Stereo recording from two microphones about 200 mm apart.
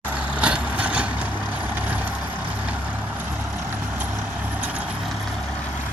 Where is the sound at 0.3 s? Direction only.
5° right (ahead or behind).